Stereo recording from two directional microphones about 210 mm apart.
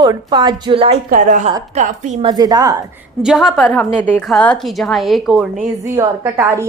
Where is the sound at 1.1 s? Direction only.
40° right (ahead or behind).